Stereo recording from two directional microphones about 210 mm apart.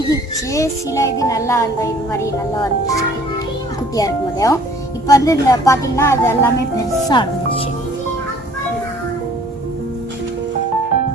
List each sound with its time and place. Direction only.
0.1 s speech: 15° left (ahead or behind)
3.9 s speech: 15° left (ahead or behind)
7.1 s speech: 20° left (ahead or behind)